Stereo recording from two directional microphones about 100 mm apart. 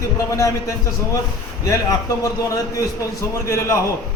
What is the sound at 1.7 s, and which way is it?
Speech, 35° left (ahead or behind).